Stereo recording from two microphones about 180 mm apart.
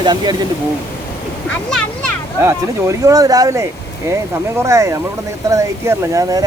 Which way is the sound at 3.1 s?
20° right (ahead or behind).